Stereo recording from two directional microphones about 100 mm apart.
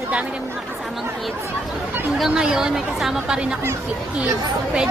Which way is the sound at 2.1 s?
5° right (ahead or behind).